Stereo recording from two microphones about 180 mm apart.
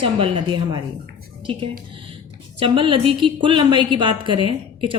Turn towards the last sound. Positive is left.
turn(degrees=-30)  # may be behind; listen again after turning